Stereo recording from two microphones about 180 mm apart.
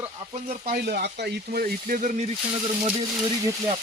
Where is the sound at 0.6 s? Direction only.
60° right (ahead or behind).